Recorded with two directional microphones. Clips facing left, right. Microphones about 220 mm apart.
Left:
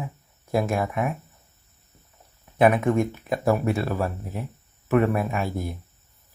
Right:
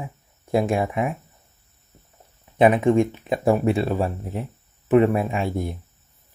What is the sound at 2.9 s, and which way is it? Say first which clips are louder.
Speech: right 4 dB; 25° right (ahead or behind).